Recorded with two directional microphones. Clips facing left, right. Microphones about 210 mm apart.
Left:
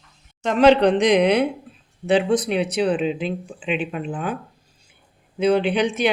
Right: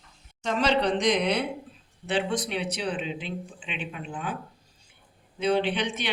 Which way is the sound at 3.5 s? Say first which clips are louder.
Left 11 dB; 60° left (ahead or behind).